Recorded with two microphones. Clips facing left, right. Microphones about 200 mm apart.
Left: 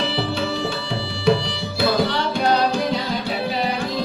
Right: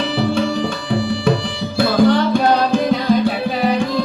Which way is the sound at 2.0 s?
50° right (ahead or behind).